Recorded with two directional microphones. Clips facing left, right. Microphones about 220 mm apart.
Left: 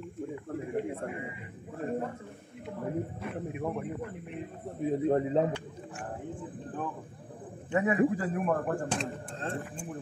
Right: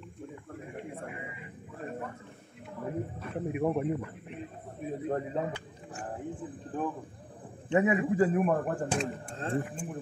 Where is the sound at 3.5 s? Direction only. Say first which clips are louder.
Right 7 dB; 15° right (ahead or behind).